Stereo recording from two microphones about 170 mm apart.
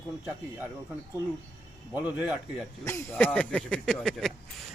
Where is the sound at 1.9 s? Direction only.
5° right (ahead or behind).